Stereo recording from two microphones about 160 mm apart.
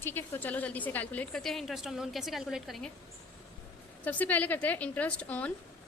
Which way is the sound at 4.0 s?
10° left (ahead or behind).